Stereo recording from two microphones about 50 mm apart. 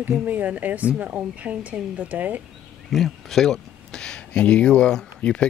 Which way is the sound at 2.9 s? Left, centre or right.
Centre.